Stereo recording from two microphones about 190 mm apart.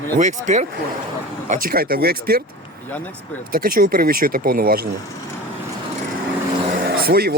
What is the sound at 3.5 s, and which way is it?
Speech, 50° right (ahead or behind).